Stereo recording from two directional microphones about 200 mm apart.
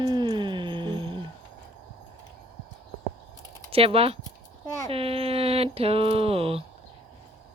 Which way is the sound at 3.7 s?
30° right (ahead or behind).